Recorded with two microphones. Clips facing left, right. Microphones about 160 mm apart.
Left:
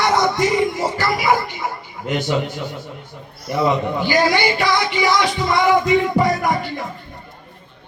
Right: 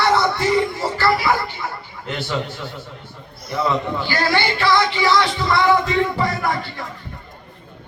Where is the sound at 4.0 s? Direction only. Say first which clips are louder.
Left 7 dB; 15° left (ahead or behind).